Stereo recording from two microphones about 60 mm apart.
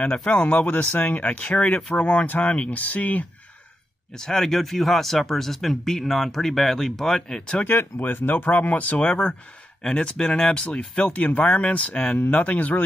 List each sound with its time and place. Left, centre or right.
0.1 s speech: left
4.2 s speech: centre
7.6 s speech: left; by 10.9 s centre
11.0 s speech: left